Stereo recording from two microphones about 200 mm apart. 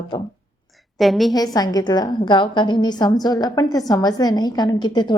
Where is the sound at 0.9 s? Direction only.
Centre (ahead or behind).